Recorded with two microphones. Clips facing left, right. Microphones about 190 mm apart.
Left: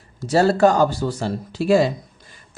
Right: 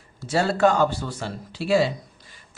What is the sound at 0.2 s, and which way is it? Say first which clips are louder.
Speech: left 5 dB; 40° left (ahead or behind).